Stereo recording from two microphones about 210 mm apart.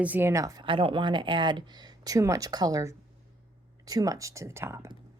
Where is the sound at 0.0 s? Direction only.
10° right (ahead or behind).